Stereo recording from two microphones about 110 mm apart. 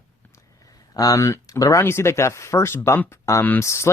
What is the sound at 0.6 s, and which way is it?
Speech, 35° left (ahead or behind).